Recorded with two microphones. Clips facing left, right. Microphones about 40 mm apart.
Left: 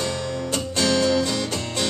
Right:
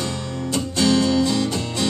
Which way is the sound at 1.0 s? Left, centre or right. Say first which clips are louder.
Right 1 dB; left.